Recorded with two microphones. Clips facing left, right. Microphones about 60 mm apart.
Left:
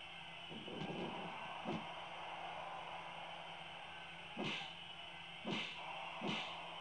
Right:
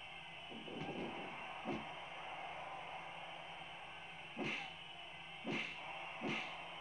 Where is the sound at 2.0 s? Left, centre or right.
Centre.